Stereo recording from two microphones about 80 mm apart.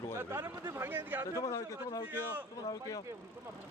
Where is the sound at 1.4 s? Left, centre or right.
Left.